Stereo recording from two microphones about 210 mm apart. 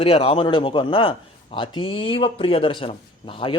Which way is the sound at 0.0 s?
25° left (ahead or behind).